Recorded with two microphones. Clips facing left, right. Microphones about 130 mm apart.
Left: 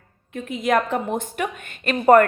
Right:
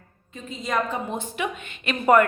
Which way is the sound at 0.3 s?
65° left (ahead or behind).